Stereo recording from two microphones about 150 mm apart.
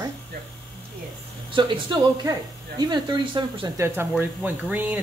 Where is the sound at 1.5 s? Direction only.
30° right (ahead or behind).